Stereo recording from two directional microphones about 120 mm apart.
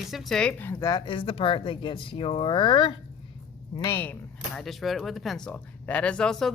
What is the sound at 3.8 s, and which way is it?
Speech, 20° left (ahead or behind).